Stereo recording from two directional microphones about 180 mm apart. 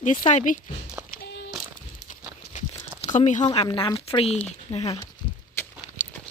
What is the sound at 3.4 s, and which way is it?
Speech, 25° left (ahead or behind).